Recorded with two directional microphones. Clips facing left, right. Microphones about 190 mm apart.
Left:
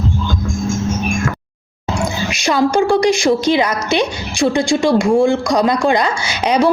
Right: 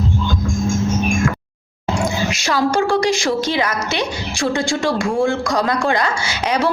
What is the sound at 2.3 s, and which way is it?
Speech, 15° left (ahead or behind).